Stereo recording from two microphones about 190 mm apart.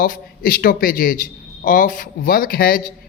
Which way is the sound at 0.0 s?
50° left (ahead or behind).